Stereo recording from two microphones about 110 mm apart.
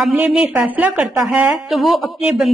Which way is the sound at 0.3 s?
10° right (ahead or behind).